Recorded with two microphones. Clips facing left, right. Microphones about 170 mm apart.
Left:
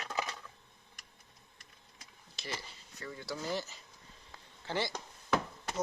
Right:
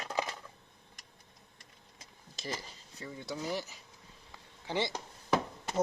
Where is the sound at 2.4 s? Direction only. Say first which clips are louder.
Right 4 dB; 45° right (ahead or behind).